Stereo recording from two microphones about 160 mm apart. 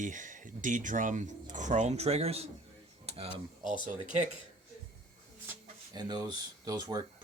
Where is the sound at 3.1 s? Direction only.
40° right (ahead or behind).